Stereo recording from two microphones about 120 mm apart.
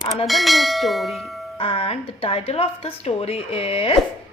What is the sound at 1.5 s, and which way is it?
A woman's voice, 50° left (ahead or behind).